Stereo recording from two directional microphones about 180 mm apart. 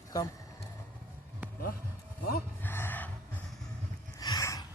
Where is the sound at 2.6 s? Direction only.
10° left (ahead or behind).